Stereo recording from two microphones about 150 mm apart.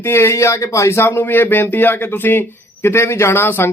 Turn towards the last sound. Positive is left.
turn(degrees=15)  # may be behind; listen again after turning